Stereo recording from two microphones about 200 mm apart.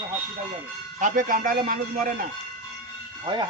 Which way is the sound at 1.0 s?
40° right (ahead or behind).